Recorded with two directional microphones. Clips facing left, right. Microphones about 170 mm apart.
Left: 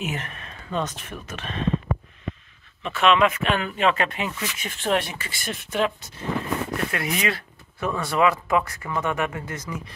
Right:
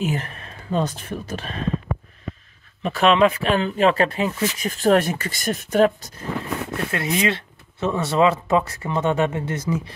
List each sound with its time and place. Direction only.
0.0 s speech: 35° right (ahead or behind)
2.8 s speech: 35° right (ahead or behind)
6.9 s speech: 25° right (ahead or behind)